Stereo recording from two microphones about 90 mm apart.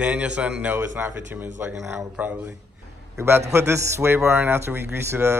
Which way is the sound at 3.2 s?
30° right (ahead or behind).